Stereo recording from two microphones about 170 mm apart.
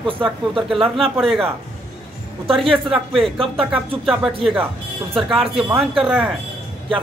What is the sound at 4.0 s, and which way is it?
Speech, 5° right (ahead or behind).